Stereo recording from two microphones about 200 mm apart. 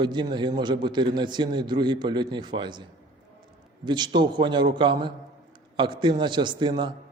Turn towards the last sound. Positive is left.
turn(degrees=-25)  # may be behind; listen again after turning